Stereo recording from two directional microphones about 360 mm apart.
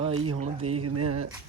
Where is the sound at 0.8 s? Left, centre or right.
Right.